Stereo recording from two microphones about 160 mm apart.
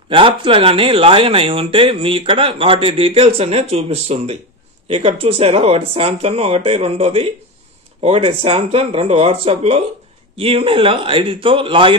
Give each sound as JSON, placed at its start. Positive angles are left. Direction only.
{"t": 0.1, "sound": "speech", "side_deg": -30}